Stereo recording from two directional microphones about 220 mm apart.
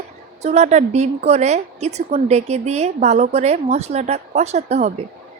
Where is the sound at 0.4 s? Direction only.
30° right (ahead or behind).